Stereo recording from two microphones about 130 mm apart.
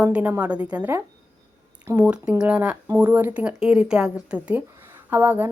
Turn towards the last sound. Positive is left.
turn(degrees=-15)  # may be behind; listen again after turning